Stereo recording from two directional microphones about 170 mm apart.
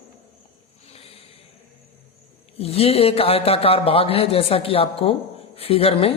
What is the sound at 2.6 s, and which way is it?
A man's voice, 35° left (ahead or behind).